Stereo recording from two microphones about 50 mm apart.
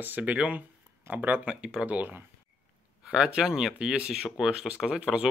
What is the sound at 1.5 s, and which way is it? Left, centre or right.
Speech, centre.